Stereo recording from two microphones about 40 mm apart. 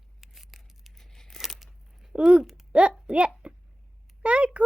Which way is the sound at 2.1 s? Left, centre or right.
Right.